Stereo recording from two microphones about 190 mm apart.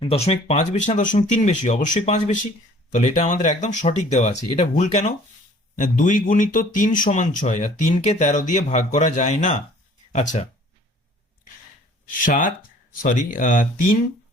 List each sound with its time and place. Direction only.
0.0 s speech: 30° left (ahead or behind)
12.2 s speech: 45° left (ahead or behind)